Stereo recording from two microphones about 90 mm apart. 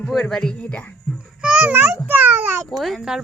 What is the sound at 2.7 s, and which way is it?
Speech, 5° right (ahead or behind).